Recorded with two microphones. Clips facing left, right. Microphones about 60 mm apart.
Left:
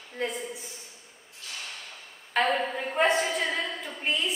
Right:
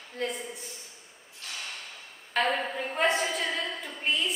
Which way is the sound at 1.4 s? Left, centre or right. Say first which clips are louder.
Right 1 dB; right.